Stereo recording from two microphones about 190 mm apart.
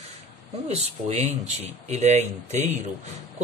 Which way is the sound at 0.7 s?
35° right (ahead or behind).